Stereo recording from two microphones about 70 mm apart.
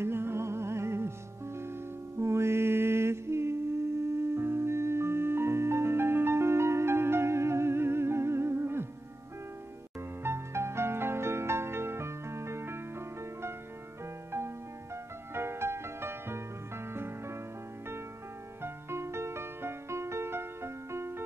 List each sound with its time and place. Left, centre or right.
0.0 s music: right
10.2 s music: right
15.3 s music: right
18.6 s music: right